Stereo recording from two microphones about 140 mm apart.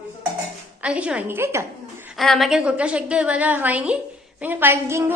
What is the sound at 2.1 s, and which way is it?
A woman's voice, centre (ahead or behind).